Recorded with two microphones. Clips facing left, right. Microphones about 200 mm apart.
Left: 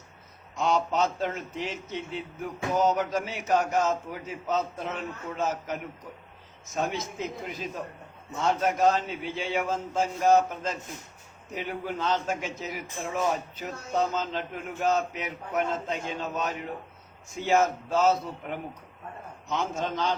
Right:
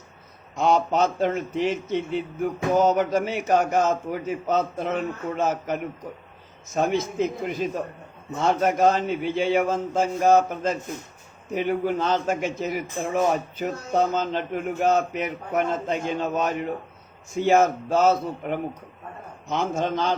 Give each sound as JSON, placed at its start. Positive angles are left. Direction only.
{"t": 0.5, "sound": "a man's voice", "side_deg": -55}